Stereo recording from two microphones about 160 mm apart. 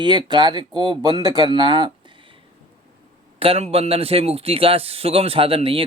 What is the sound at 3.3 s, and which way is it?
A man's voice, 35° right (ahead or behind).